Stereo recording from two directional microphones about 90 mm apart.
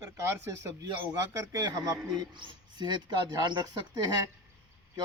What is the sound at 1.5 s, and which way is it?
A man's voice, 45° right (ahead or behind).